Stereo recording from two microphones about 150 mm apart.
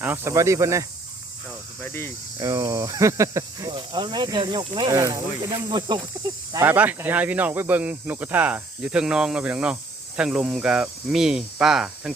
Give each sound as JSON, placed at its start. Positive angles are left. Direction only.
{"t": 0.0, "sound": "speech", "side_deg": -15}
{"t": 1.8, "sound": "speech", "side_deg": 15}
{"t": 2.4, "sound": "speech", "side_deg": -25}
{"t": 6.7, "sound": "speech", "side_deg": -10}